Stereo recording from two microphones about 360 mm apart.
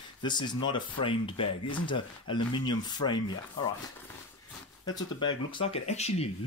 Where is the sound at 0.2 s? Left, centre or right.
Centre.